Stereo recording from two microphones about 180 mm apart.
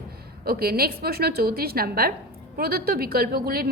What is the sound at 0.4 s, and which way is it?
A woman's voice, 60° right (ahead or behind).